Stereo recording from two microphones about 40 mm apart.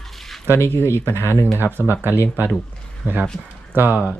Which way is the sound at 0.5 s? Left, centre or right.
Left.